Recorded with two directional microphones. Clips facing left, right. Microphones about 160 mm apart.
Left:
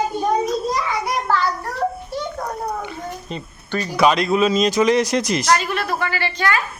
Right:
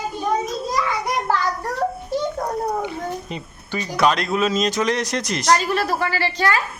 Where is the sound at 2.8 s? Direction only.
15° right (ahead or behind).